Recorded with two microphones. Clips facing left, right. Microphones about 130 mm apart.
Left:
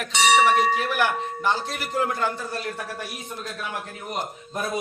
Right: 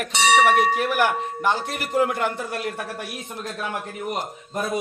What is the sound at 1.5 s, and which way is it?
Speech, 50° right (ahead or behind).